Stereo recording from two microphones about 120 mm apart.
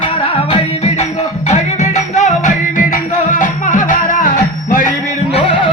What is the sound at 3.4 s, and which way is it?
Music, 90° left.